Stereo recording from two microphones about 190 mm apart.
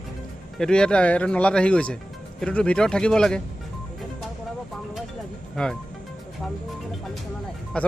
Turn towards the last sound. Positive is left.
turn(degrees=5)  # may be behind; listen again after turning